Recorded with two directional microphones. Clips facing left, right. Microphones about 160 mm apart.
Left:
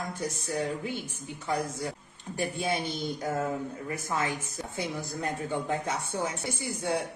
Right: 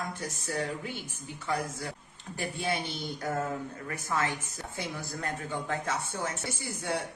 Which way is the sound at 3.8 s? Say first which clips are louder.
Right 1 dB; 20° left (ahead or behind).